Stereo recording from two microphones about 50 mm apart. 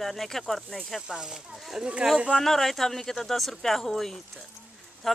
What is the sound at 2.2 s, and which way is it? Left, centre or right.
Speech, centre.